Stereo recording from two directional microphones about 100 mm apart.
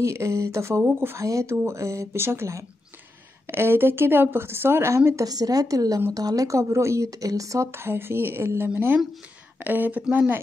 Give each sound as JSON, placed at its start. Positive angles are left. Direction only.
{"t": 0.0, "sound": "a woman's voice", "side_deg": -30}